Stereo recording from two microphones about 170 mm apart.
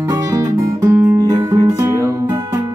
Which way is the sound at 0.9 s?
20° right (ahead or behind).